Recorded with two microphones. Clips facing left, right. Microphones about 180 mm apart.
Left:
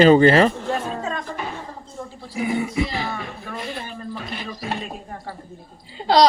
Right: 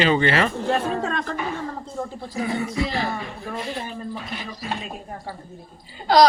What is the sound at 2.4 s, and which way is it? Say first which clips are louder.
Speech: left 2 dB; 15° left (ahead or behind).